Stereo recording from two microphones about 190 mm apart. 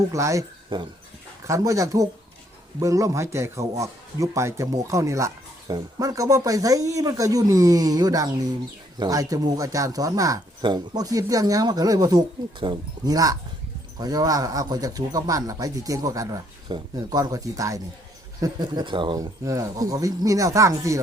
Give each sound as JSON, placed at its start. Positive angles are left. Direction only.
{"t": 0.1, "sound": "a man's voice", "side_deg": -15}